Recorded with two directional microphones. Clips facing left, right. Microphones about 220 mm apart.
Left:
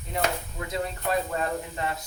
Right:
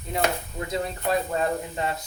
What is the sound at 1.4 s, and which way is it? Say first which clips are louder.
Speech: right 3 dB; 30° right (ahead or behind).